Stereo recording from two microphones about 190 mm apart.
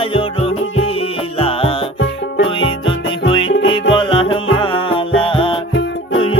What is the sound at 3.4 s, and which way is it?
Music, 85° left.